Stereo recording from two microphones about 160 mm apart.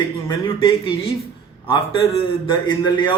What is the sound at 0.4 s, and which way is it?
A man's voice, 30° left (ahead or behind).